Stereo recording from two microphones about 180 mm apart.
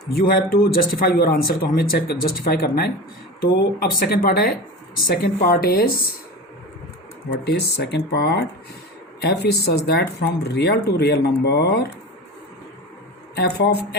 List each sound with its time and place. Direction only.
0.1 s speech: 55° left (ahead or behind)
7.3 s speech: 65° left (ahead or behind)
13.3 s speech: 65° left (ahead or behind)